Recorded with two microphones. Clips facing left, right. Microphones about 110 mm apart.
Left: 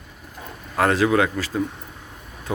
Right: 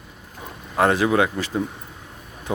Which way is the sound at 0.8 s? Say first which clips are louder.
Even; 20° right (ahead or behind).